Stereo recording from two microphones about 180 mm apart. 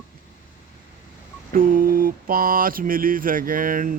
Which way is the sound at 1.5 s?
50° right (ahead or behind).